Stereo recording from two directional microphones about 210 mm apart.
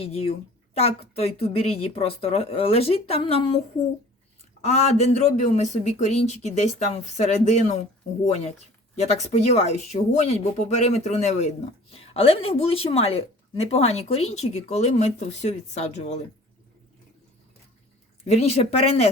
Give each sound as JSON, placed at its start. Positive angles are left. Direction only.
{"t": 0.0, "sound": "a woman's voice", "side_deg": 30}
{"t": 4.6, "sound": "speech", "side_deg": 30}
{"t": 18.3, "sound": "a woman's voice", "side_deg": 30}